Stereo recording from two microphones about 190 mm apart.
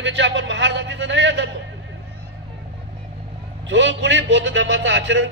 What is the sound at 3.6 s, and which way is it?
A man's voice, 70° right (ahead or behind).